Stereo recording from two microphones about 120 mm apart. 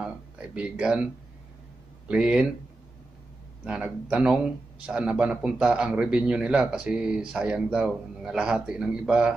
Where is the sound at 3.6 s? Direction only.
10° right (ahead or behind).